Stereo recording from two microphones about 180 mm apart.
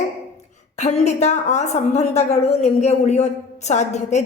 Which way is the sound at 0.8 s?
40° left (ahead or behind).